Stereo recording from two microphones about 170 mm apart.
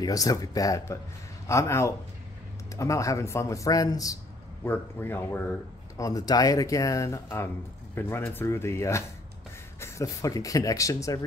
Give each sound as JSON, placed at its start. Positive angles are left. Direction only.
{"t": 0.0, "sound": "a man's voice", "side_deg": 20}